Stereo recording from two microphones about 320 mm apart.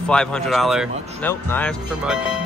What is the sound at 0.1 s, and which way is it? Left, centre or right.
Speech, centre.